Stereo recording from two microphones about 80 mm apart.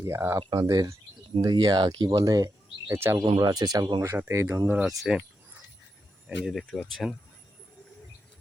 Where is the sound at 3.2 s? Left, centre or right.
Right.